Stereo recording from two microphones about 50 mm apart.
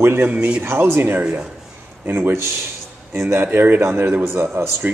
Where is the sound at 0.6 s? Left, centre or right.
Right.